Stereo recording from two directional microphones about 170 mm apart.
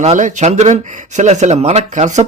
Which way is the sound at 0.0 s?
45° right (ahead or behind).